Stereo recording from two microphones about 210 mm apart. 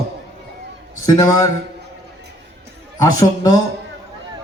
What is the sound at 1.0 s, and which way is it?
Speech, 15° left (ahead or behind).